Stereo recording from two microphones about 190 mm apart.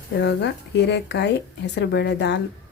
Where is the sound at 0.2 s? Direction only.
65° left (ahead or behind).